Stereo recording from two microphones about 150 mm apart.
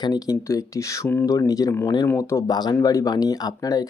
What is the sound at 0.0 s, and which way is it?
Speech, 25° left (ahead or behind).